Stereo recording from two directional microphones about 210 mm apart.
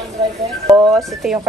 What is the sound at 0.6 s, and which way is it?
Speech, 15° right (ahead or behind).